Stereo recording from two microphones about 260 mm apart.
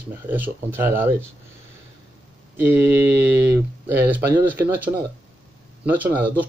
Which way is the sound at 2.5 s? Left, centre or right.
Centre.